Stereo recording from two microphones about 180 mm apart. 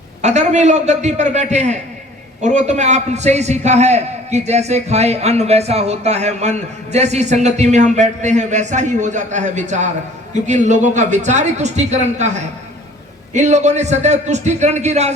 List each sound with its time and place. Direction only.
0.2 s a man's voice: 40° right (ahead or behind)